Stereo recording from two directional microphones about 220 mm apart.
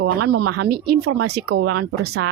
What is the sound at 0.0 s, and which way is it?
Speech, 90° right.